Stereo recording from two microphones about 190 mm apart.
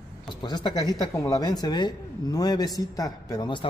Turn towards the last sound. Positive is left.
turn(degrees=20)  # may be behind; listen again after turning